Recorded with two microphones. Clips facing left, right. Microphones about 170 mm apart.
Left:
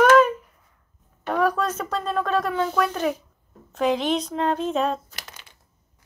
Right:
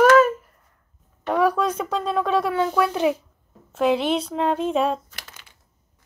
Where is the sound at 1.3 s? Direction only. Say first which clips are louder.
Right 2 dB; 10° right (ahead or behind).